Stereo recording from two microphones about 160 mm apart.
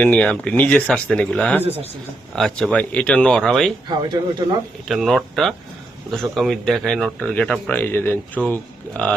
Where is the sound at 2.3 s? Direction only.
5° left (ahead or behind).